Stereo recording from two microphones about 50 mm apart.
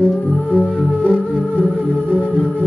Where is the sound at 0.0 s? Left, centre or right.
Left.